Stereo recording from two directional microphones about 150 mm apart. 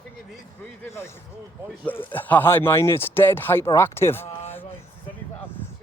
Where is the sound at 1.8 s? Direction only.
10° left (ahead or behind).